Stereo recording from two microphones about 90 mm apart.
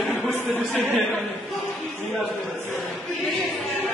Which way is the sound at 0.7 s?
15° left (ahead or behind).